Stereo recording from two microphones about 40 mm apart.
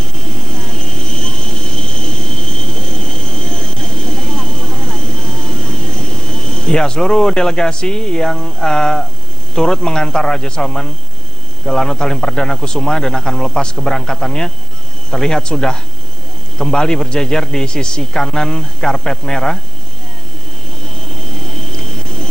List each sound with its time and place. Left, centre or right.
0.0 s vehicle: centre
9.6 s a man's voice: centre
20.8 s vehicle: centre